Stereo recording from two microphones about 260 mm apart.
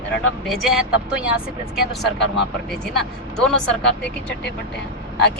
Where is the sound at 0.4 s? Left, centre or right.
Centre.